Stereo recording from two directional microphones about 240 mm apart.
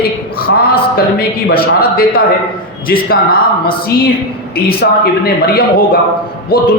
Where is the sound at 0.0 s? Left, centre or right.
Left.